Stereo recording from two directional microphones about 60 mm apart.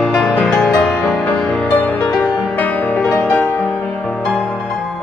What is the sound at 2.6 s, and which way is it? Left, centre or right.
Music, left.